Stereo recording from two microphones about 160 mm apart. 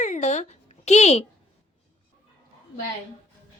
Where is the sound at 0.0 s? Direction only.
45° left (ahead or behind).